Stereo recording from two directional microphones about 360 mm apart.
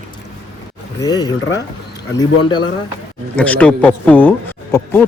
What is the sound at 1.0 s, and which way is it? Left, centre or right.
Speech, centre.